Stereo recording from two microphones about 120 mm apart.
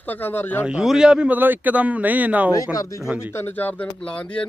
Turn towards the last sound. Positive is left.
turn(degrees=10)  # may be behind; listen again after turning